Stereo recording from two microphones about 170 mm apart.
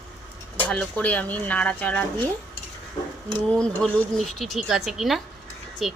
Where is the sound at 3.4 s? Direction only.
5° left (ahead or behind).